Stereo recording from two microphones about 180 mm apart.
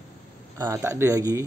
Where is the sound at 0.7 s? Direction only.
15° right (ahead or behind).